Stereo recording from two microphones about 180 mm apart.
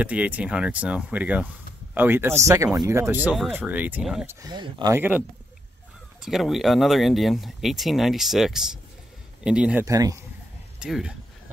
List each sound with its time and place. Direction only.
0.0 s speech: 10° right (ahead or behind)
4.4 s speech: 25° right (ahead or behind)
4.9 s speech: 10° right (ahead or behind)
6.2 s speech: centre (ahead or behind)
9.8 s speech: 20° right (ahead or behind)
10.8 s speech: 5° right (ahead or behind)